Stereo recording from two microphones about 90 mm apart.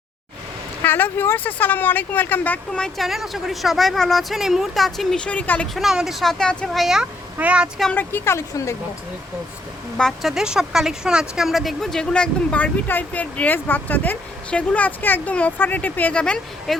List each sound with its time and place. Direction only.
0.8 s speech: 20° left (ahead or behind)
3.1 s speech: centre (ahead or behind); by 5.6 s 15° left (ahead or behind)
5.7 s speech: 5° right (ahead or behind)
6.4 s speech: 10° left (ahead or behind)
6.7 s speech: 5° right (ahead or behind)
7.9 s speech: 25° left (ahead or behind)
10.0 s speech: centre (ahead or behind)